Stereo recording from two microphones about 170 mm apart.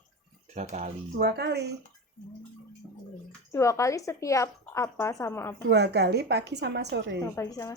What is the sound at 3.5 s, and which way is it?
A woman's voice, 20° left (ahead or behind).